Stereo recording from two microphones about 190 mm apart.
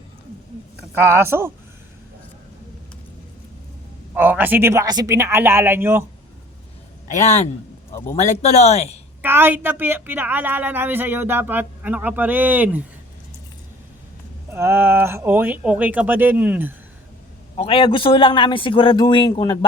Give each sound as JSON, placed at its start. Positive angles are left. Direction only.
{"t": 0.9, "sound": "a woman's voice", "side_deg": -10}
{"t": 4.1, "sound": "a woman's voice", "side_deg": -10}
{"t": 7.1, "sound": "speech", "side_deg": 35}
{"t": 9.2, "sound": "a woman's voice", "side_deg": -10}
{"t": 14.5, "sound": "a woman's voice", "side_deg": -15}
{"t": 17.6, "sound": "a man's voice", "side_deg": 30}